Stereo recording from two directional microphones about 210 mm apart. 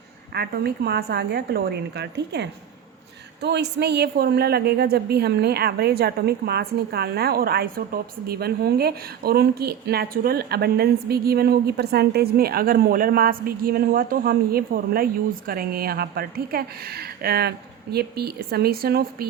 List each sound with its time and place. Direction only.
0.3 s a woman's voice: 50° right (ahead or behind)